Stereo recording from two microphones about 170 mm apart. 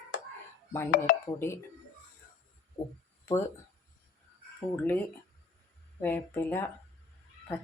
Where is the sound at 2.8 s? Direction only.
20° left (ahead or behind).